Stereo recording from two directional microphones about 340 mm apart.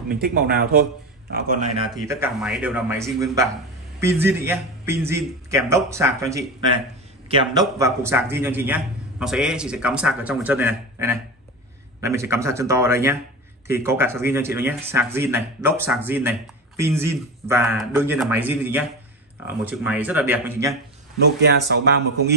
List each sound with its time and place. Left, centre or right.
0.1 s speech: right
1.9 s a man's voice: centre
21.4 s speech: right